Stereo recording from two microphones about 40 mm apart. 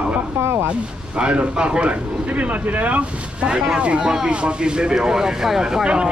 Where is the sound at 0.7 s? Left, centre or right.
Right.